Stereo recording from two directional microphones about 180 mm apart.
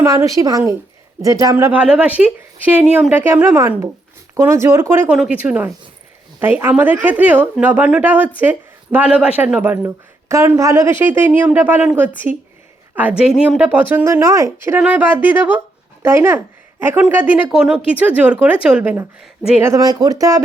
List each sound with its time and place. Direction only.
0.0 s speech: 15° right (ahead or behind)